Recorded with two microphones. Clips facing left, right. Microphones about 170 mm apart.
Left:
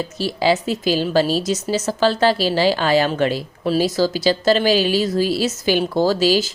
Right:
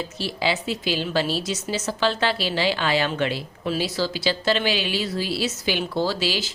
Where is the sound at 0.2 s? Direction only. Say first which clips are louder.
Left 8 dB; 40° left (ahead or behind).